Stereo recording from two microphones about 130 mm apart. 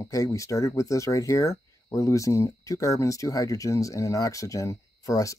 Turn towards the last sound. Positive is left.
turn(degrees=25)  # may be behind; listen again after turning